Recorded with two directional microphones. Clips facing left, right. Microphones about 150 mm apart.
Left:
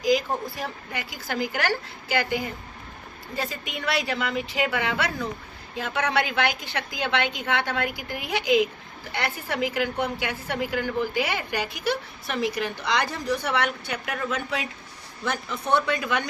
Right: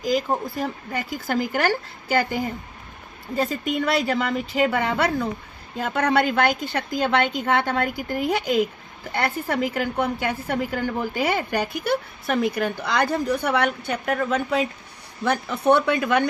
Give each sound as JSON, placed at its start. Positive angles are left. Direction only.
{"t": 0.0, "sound": "a woman's voice", "side_deg": -50}
{"t": 13.9, "sound": "speech", "side_deg": -40}
{"t": 15.2, "sound": "speech", "side_deg": -60}